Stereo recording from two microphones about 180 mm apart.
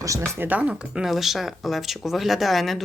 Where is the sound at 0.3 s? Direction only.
10° right (ahead or behind).